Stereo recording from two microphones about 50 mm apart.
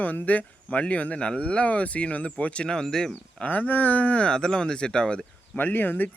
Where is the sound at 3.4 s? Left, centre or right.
Left.